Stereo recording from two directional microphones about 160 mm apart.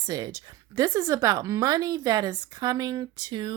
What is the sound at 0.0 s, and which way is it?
Speech, 25° right (ahead or behind).